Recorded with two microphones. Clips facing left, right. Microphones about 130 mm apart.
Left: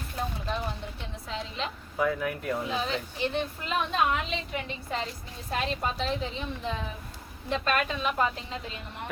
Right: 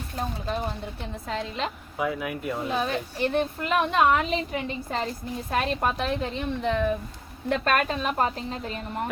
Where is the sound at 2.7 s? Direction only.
55° right (ahead or behind).